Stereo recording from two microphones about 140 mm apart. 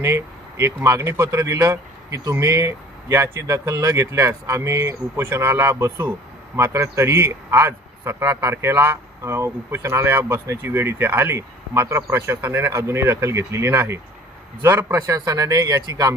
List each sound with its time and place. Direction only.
0.0 s a man's voice: 20° right (ahead or behind)